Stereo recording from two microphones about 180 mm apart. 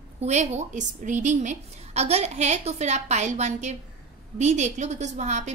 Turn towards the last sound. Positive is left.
turn(degrees=-40)  # may be behind; listen again after turning